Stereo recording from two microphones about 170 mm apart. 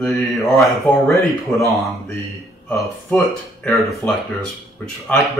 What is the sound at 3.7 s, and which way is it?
Speech, centre (ahead or behind).